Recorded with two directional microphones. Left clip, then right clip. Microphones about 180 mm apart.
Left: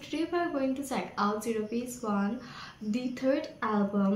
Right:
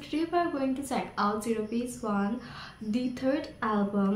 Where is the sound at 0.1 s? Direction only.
15° right (ahead or behind).